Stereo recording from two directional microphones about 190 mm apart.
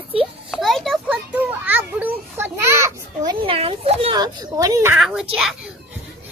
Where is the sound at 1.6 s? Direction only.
10° right (ahead or behind).